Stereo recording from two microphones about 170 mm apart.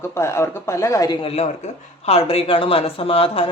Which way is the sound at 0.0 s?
15° left (ahead or behind).